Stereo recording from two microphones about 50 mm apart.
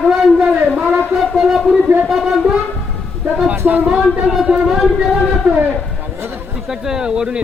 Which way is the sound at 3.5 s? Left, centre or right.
Right.